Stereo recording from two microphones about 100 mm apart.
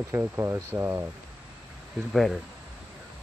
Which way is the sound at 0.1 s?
25° right (ahead or behind).